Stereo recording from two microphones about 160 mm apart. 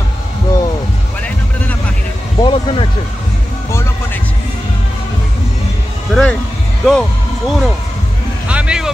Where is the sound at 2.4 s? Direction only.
30° left (ahead or behind).